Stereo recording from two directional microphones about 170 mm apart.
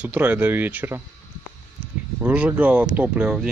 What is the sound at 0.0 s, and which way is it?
Speech, 10° right (ahead or behind).